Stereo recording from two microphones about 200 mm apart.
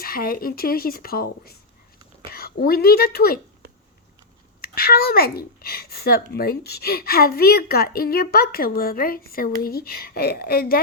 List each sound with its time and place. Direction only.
0.0 s a woman's voice: 45° left (ahead or behind)
4.6 s speech: 50° left (ahead or behind)